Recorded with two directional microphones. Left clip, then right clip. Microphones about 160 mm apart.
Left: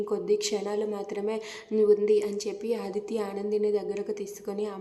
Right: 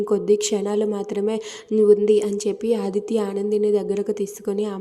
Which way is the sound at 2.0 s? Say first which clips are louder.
Right 6 dB; 35° right (ahead or behind).